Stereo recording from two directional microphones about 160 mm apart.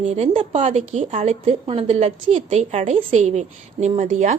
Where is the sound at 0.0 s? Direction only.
45° right (ahead or behind).